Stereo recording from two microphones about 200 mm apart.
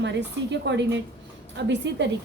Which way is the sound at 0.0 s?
60° right (ahead or behind).